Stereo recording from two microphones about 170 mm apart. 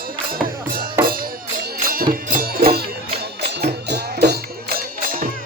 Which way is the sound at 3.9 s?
75° right (ahead or behind).